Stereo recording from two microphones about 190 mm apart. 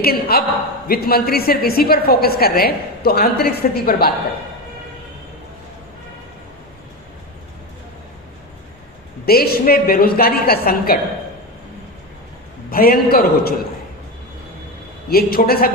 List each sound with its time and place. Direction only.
0.0 s a woman's voice: 55° left (ahead or behind)
9.2 s a woman's voice: 55° left (ahead or behind)
12.7 s a woman's voice: 50° left (ahead or behind)
15.1 s a woman's voice: 55° left (ahead or behind)